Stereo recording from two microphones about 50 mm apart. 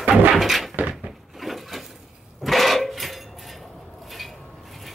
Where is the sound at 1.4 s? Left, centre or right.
Centre.